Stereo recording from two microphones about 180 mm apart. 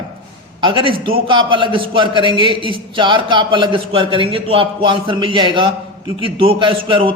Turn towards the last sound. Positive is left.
turn(degrees=-30)  # may be behind; listen again after turning